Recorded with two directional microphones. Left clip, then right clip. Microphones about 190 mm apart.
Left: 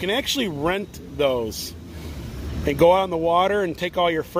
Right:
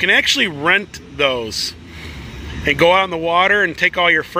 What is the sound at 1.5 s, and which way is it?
Speech, 90° left.